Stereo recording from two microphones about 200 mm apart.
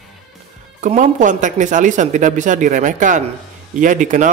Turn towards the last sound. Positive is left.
turn(degrees=-40)  # may be behind; listen again after turning